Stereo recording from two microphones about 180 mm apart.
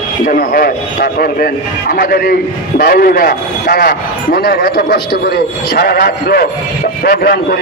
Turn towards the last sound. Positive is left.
turn(degrees=60)  # may be behind; listen again after turning